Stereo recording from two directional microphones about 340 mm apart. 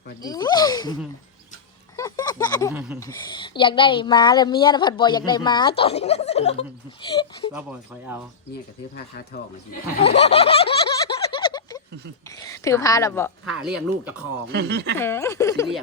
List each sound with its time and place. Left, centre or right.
0.2 s speech: centre
2.0 s a sound: centre
3.0 s a woman's voice: centre
7.5 s speech: centre
9.0 s speech: left
10.0 s a sound: centre
12.4 s a woman's voice: centre
14.5 s speech: right
14.9 s a woman's voice: centre